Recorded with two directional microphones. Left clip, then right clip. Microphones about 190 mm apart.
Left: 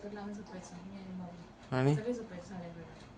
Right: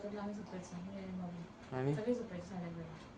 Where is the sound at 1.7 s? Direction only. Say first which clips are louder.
Left 7 dB; 45° left (ahead or behind).